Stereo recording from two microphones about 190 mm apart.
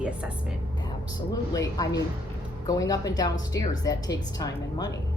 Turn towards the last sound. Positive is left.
turn(degrees=20)  # may be behind; listen again after turning